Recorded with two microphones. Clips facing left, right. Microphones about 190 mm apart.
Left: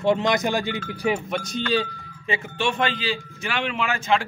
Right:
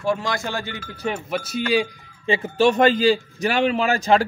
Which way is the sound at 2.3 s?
40° right (ahead or behind).